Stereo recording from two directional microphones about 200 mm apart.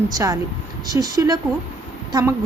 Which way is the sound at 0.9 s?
20° right (ahead or behind).